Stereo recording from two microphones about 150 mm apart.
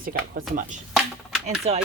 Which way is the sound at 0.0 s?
65° right (ahead or behind).